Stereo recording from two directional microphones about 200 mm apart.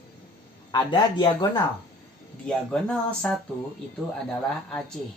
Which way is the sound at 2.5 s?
5° left (ahead or behind).